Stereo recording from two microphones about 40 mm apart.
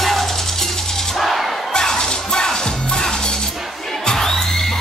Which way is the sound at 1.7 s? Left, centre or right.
Centre.